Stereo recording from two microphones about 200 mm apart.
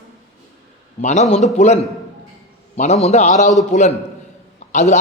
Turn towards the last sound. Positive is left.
turn(degrees=35)  # may be behind; listen again after turning